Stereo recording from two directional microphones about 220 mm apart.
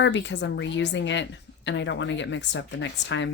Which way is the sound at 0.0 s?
55° left (ahead or behind).